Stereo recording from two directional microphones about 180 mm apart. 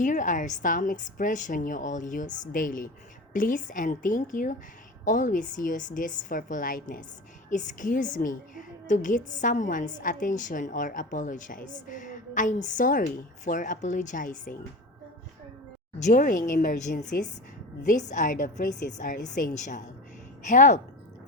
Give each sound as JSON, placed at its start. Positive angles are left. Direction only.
{"t": 0.0, "sound": "a woman's voice", "side_deg": 45}
{"t": 16.0, "sound": "a woman's voice", "side_deg": 45}